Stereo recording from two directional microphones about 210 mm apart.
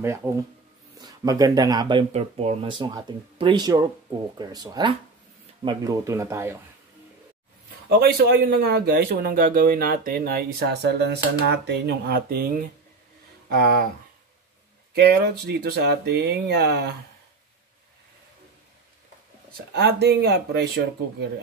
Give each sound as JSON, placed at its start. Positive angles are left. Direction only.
{"t": 0.0, "sound": "speech", "side_deg": -10}
{"t": 8.0, "sound": "speech", "side_deg": -45}
{"t": 13.6, "sound": "speech", "side_deg": -45}
{"t": 15.0, "sound": "speech", "side_deg": -50}
{"t": 19.5, "sound": "speech", "side_deg": -50}